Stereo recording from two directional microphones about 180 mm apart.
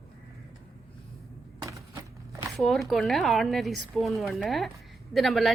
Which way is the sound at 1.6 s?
20° right (ahead or behind).